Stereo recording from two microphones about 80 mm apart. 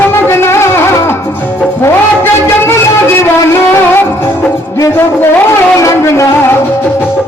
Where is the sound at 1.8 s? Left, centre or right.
Left.